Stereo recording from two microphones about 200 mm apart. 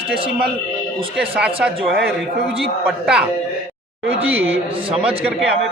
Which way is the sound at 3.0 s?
5° right (ahead or behind).